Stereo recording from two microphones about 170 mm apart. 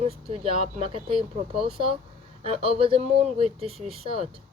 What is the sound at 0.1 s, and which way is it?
A woman's voice, 35° right (ahead or behind).